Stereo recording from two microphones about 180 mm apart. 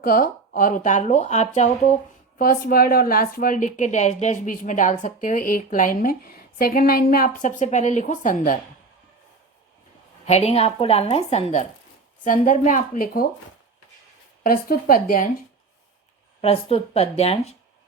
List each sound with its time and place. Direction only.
0.0 s a woman's voice: 50° left (ahead or behind)
2.4 s a woman's voice: 50° left (ahead or behind)
10.2 s a woman's voice: 35° left (ahead or behind)
12.2 s a woman's voice: 45° left (ahead or behind)
14.4 s a woman's voice: 55° left (ahead or behind)
16.4 s a woman's voice: 35° left (ahead or behind)